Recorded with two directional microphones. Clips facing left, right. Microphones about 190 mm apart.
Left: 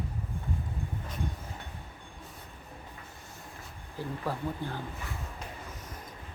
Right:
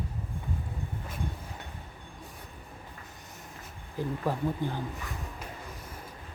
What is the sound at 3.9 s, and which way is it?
Speech, 15° right (ahead or behind).